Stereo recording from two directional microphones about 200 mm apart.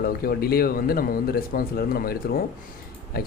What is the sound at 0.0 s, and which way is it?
Speech, 50° left (ahead or behind).